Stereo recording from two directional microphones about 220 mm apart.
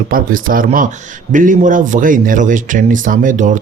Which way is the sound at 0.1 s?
40° right (ahead or behind).